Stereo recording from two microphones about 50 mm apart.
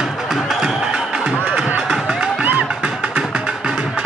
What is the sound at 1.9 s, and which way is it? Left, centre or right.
Music, centre.